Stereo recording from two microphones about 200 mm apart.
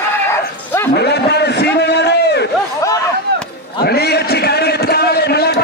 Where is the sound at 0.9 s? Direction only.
55° left (ahead or behind).